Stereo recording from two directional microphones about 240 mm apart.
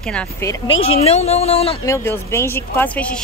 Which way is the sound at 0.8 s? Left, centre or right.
Left.